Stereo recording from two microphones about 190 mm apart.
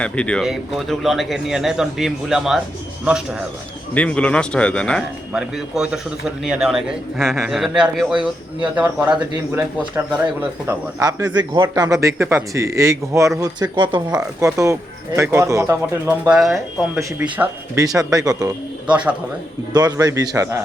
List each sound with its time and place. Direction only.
0.0 s a man's voice: 5° left (ahead or behind)
3.9 s a man's voice: 5° left (ahead or behind)
10.7 s speech: 20° right (ahead or behind)
19.7 s speech: 20° right (ahead or behind)